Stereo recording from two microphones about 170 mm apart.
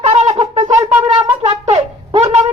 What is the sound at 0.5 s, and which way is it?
Wind instrument, 20° right (ahead or behind).